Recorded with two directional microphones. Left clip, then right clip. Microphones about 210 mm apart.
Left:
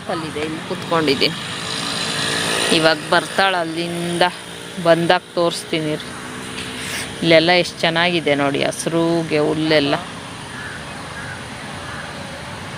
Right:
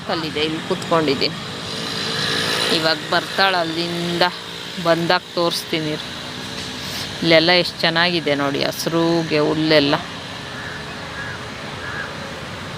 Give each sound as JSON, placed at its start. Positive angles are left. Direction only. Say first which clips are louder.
{"t": 1.0, "sound": "speech", "louder": "left 2 dB", "side_deg": 10}
{"t": 1.8, "sound": "vehicle", "louder": "even", "side_deg": 55}
{"t": 2.7, "sound": "speech", "louder": "left 3 dB", "side_deg": 20}
{"t": 4.2, "sound": "speech", "louder": "left 2 dB", "side_deg": 5}
{"t": 7.3, "sound": "speech", "louder": "left 1 dB", "side_deg": 0}